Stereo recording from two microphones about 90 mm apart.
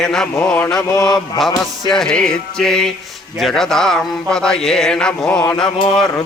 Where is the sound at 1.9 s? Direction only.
5° left (ahead or behind).